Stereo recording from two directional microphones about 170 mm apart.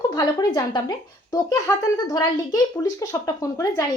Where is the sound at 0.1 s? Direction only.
20° left (ahead or behind).